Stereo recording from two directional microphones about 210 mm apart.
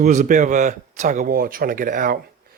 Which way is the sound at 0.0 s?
35° right (ahead or behind).